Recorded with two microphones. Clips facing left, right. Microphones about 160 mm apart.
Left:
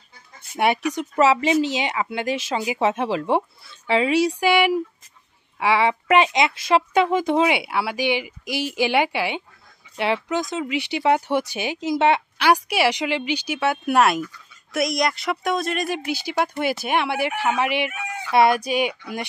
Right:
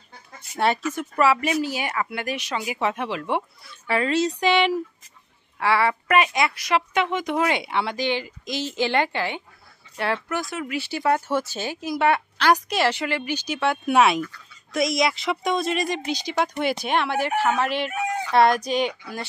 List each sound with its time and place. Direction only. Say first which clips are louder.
0.6 s speech: left 2 dB; 15° left (ahead or behind); by 7.4 s 30° left (ahead or behind)
7.4 s speech: left 2 dB; 10° left (ahead or behind)
12.4 s a woman's voice: left 1 dB; 10° left (ahead or behind)